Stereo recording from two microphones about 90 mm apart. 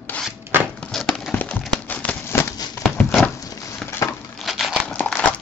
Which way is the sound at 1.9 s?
20° left (ahead or behind).